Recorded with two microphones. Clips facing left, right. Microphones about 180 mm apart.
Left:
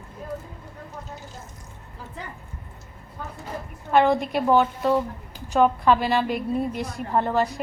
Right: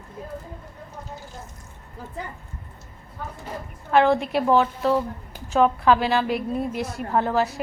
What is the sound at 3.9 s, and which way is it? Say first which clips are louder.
A woman's voice: right 1 dB; centre (ahead or behind).